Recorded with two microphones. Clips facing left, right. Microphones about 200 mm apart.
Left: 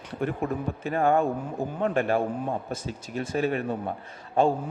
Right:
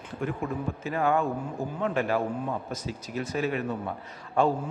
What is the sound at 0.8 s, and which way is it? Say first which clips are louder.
Speech: left 3 dB; 55° left (ahead or behind).